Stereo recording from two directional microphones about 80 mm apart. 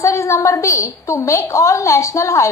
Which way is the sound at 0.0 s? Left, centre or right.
Left.